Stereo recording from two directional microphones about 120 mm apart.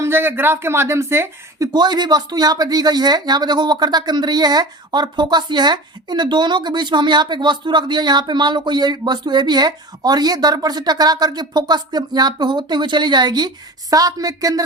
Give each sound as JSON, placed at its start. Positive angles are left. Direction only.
{"t": 0.0, "sound": "speech", "side_deg": -20}